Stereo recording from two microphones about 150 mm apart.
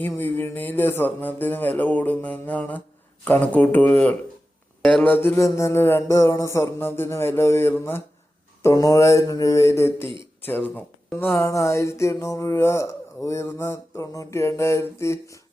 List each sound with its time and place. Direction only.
0.0 s a sound: 15° left (ahead or behind)
8.6 s mantra: 25° left (ahead or behind)
10.4 s speech: 15° left (ahead or behind)
11.3 s mantra: 20° left (ahead or behind)